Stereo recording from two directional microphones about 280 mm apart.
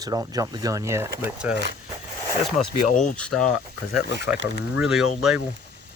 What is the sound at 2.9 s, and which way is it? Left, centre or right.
Speech, left.